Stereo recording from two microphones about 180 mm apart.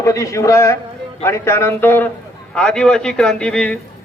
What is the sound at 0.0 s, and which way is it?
A man's voice, 15° left (ahead or behind).